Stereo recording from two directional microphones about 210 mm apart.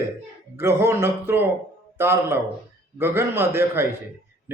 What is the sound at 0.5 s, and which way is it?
A man's voice, 10° right (ahead or behind).